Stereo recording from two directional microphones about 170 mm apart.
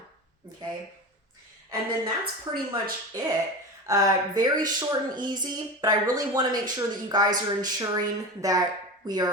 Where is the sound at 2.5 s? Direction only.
20° right (ahead or behind).